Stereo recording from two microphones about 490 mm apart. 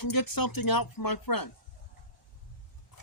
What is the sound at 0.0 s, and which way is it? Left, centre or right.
Speech, left.